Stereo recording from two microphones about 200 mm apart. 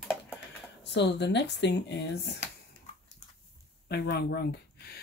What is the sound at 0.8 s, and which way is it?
Speech, 60° left (ahead or behind).